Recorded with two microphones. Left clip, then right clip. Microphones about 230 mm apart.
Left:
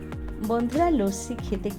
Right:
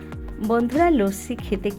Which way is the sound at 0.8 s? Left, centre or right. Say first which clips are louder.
Right 3 dB; right.